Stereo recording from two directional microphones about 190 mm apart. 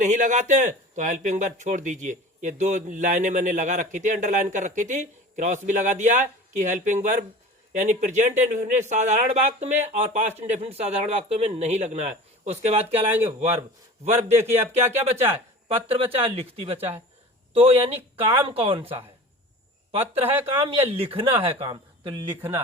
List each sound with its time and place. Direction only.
0.0 s speech: 40° right (ahead or behind)
13.1 s speech: 10° right (ahead or behind)
15.7 s speech: 30° right (ahead or behind)
22.4 s speech: 10° right (ahead or behind)